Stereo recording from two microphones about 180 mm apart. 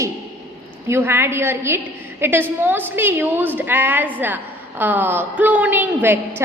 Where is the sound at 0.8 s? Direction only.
15° right (ahead or behind).